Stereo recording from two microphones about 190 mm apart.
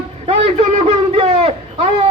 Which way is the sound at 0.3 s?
30° right (ahead or behind).